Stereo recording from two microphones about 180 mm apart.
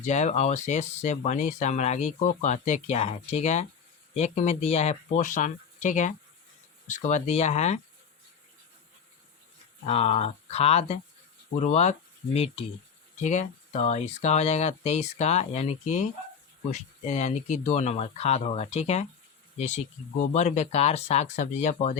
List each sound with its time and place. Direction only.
0.0 s speech: 40° left (ahead or behind)
9.8 s speech: 35° left (ahead or behind)